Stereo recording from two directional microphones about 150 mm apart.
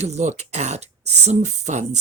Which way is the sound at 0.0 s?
50° right (ahead or behind).